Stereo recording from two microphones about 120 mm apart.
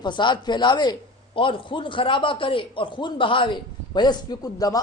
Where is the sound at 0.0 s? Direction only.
40° left (ahead or behind).